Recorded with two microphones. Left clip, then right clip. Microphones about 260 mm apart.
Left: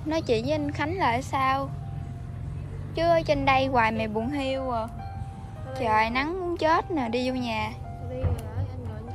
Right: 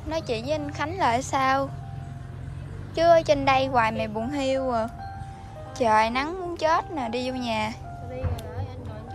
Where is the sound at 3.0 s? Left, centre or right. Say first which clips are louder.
Right 4 dB; centre.